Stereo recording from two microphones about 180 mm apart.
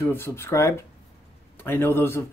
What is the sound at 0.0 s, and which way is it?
Speech, 15° left (ahead or behind).